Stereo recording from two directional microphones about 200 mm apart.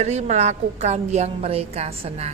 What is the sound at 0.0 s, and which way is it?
A woman's voice, 35° right (ahead or behind).